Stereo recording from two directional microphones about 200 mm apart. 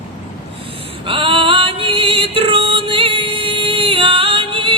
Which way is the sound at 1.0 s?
25° right (ahead or behind).